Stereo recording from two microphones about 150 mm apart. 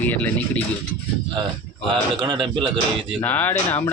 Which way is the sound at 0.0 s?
10° left (ahead or behind).